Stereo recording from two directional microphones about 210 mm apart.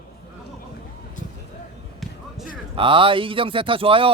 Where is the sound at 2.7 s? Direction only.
25° right (ahead or behind).